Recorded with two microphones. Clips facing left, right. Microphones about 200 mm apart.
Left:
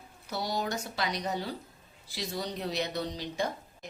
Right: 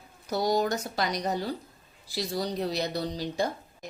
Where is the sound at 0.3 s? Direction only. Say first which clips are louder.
Right 7 dB; 45° right (ahead or behind).